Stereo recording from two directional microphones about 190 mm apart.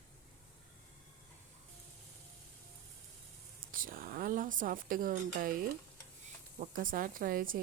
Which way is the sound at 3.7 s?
45° right (ahead or behind).